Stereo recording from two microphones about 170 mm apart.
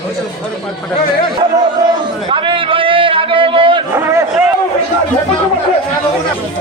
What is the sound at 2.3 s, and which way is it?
A man's voice, 30° right (ahead or behind).